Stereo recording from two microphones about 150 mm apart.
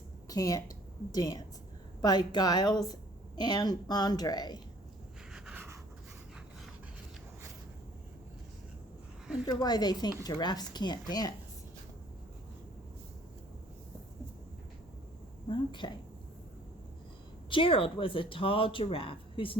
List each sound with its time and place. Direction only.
0.3 s a woman's voice: 25° left (ahead or behind)
5.3 s writing: 5° right (ahead or behind)
9.5 s a woman's voice: 25° left (ahead or behind)
15.4 s a sound: 30° left (ahead or behind)
17.5 s speech: 35° left (ahead or behind)